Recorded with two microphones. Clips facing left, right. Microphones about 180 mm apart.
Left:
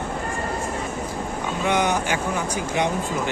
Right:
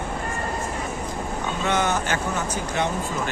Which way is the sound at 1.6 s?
15° left (ahead or behind).